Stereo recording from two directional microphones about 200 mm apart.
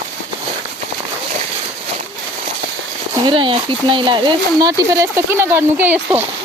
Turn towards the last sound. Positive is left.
turn(degrees=-10)  # may be behind; listen again after turning